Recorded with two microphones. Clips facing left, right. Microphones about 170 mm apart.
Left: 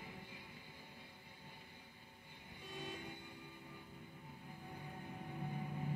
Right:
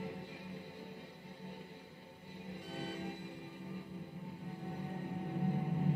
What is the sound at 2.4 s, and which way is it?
Music, 70° right (ahead or behind).